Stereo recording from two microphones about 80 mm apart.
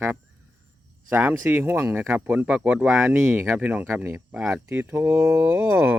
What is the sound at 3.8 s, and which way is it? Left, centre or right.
Speech, right.